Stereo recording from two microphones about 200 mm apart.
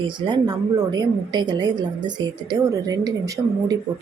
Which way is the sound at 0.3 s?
20° right (ahead or behind).